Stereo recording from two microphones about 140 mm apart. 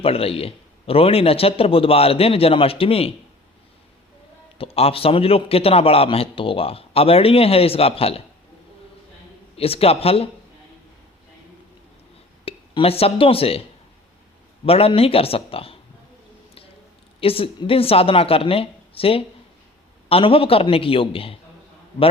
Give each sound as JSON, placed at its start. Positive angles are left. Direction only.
{"t": 0.0, "sound": "a man's voice", "side_deg": 45}
{"t": 4.5, "sound": "a man's voice", "side_deg": 45}
{"t": 9.6, "sound": "a man's voice", "side_deg": 45}
{"t": 12.5, "sound": "a man's voice", "side_deg": 45}
{"t": 17.2, "sound": "a woman's voice", "side_deg": 40}